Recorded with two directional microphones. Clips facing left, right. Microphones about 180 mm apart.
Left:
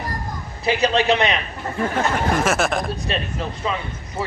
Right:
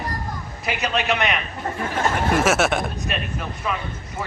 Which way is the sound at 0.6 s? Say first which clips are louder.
Left 6 dB; 30° left (ahead or behind).